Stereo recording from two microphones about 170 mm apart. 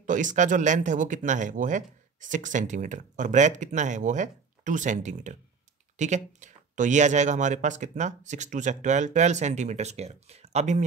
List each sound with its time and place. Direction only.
0.0 s speech: 50° right (ahead or behind)